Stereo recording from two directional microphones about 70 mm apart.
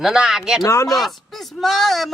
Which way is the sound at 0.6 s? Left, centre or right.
Left.